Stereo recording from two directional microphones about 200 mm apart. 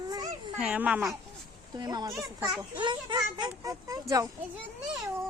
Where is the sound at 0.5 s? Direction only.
5° right (ahead or behind).